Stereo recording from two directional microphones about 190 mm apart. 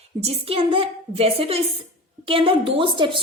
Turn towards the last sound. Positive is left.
turn(degrees=-25)  # may be behind; listen again after turning